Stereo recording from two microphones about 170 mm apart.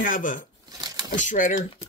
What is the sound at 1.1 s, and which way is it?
Speech, 50° left (ahead or behind).